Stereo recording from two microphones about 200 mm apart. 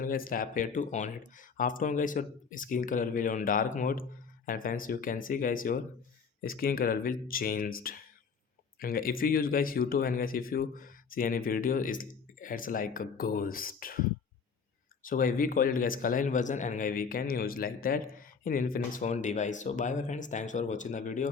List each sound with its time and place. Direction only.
0.0 s speech: 45° left (ahead or behind)
15.0 s speech: 45° left (ahead or behind)